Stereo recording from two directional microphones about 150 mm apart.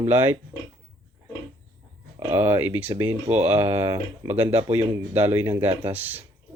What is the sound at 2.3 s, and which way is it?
Speech, 15° right (ahead or behind).